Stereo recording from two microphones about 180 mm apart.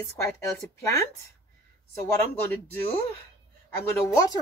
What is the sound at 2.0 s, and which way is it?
Speech, 10° left (ahead or behind).